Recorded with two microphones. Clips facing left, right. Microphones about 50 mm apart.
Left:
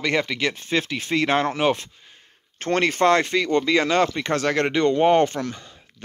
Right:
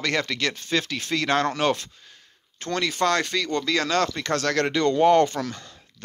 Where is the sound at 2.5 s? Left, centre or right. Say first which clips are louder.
Left 5 dB; left.